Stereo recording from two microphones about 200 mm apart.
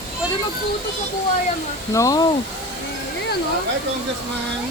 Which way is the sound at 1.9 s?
15° left (ahead or behind).